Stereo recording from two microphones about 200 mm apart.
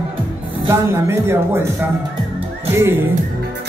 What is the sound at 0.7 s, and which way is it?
Speech, 10° right (ahead or behind).